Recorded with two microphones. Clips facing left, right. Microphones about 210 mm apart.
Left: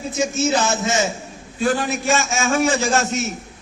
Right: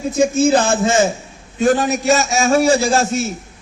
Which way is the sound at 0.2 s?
55° right (ahead or behind).